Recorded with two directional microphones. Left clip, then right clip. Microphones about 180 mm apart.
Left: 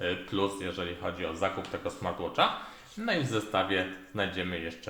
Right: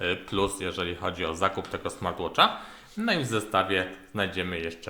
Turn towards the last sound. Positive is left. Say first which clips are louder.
# right 3 dB
turn(degrees=-30)  # may be behind; listen again after turning